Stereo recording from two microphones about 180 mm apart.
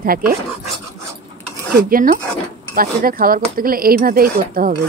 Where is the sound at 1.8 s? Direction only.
50° right (ahead or behind).